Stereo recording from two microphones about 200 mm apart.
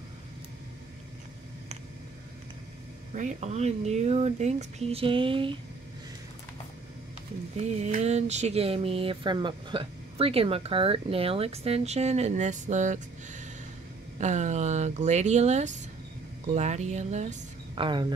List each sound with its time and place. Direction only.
3.2 s speech: 35° right (ahead or behind)
7.5 s speech: 35° right (ahead or behind)